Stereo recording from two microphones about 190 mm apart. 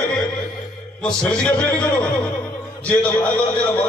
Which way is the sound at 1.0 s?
5° left (ahead or behind).